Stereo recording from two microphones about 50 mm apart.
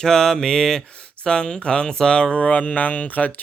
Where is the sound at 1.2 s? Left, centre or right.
Centre.